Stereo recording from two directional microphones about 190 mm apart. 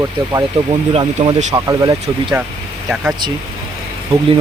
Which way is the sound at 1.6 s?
15° right (ahead or behind).